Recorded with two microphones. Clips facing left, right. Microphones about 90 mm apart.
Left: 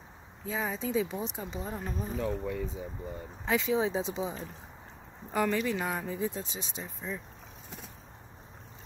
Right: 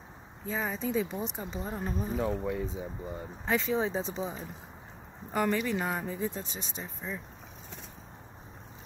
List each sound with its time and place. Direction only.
0.5 s speech: centre (ahead or behind)
1.7 s speech: 10° right (ahead or behind)
2.5 s speech: 20° right (ahead or behind)
3.4 s speech: centre (ahead or behind)
5.3 s speech: 5° right (ahead or behind)